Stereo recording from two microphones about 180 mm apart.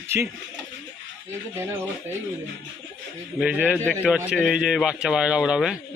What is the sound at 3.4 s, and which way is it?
Speech, 10° right (ahead or behind).